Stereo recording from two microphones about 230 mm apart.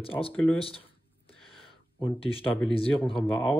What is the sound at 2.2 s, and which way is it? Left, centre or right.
Speech, left.